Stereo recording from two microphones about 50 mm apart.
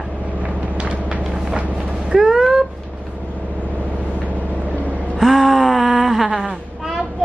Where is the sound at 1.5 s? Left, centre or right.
Right.